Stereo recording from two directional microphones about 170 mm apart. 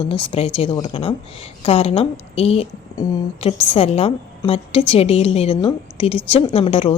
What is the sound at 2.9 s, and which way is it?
Speech, 20° left (ahead or behind).